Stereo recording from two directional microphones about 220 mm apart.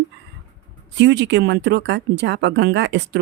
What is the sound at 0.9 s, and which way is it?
Speech, 50° right (ahead or behind).